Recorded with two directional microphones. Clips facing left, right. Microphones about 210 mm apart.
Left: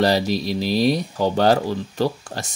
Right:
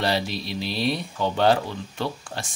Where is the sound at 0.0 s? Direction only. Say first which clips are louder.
Left 7 dB; 40° left (ahead or behind).